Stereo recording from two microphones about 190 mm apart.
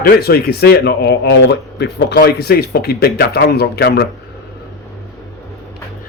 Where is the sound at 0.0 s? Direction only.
55° left (ahead or behind).